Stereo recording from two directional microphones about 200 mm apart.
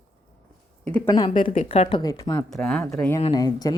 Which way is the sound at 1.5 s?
35° left (ahead or behind).